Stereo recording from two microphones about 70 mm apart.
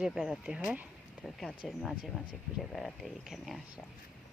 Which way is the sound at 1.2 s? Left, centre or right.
Centre.